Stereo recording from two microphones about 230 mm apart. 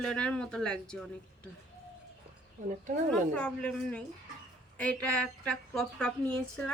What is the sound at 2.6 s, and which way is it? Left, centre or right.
Speech, right.